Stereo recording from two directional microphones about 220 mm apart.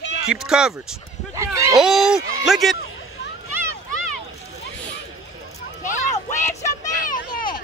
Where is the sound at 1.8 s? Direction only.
Centre (ahead or behind).